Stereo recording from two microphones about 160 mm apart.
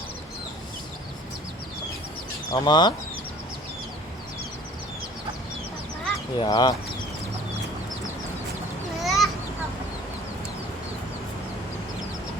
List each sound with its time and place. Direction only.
2.5 s speech: 25° left (ahead or behind)
6.3 s speech: 30° left (ahead or behind)
9.0 s a sound: centre (ahead or behind)